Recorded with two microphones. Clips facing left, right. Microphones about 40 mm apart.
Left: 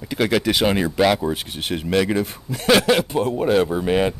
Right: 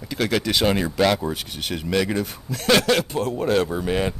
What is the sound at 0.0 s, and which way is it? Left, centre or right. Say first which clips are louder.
Speech: left 3 dB; centre.